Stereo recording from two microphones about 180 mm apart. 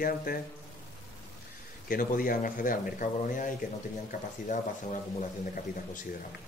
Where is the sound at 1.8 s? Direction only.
50° left (ahead or behind).